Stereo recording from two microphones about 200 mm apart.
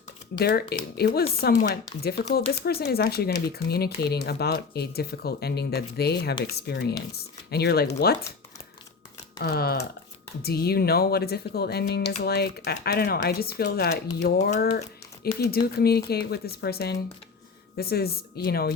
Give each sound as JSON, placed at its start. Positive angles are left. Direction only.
{"t": 0.3, "sound": "speech", "side_deg": 50}
{"t": 9.4, "sound": "speech", "side_deg": 50}